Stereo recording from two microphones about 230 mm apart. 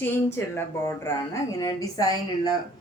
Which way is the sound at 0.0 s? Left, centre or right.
Centre.